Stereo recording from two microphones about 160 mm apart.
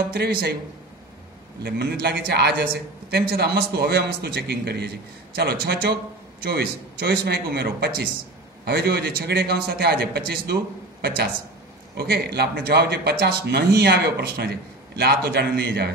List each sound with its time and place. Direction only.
0.1 s a man's voice: 75° right (ahead or behind)
1.6 s a man's voice: 80° right